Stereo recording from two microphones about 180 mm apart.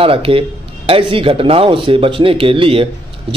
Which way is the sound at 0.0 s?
30° right (ahead or behind).